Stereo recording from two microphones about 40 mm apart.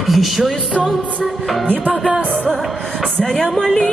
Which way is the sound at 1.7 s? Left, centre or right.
Right.